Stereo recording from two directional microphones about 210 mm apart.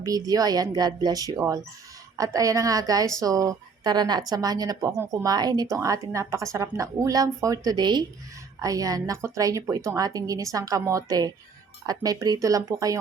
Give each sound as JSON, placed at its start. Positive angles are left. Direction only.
{"t": 0.0, "sound": "speech", "side_deg": -15}